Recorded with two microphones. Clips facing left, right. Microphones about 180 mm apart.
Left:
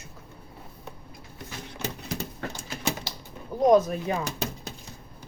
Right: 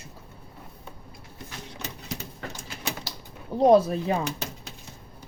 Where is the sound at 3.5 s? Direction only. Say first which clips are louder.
Right 2 dB; 30° right (ahead or behind).